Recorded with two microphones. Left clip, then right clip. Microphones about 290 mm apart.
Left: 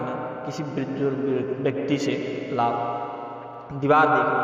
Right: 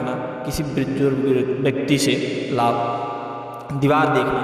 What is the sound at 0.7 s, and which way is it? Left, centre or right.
A man's voice, right.